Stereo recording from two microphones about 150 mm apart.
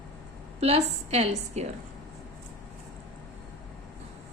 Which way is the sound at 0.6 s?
45° right (ahead or behind).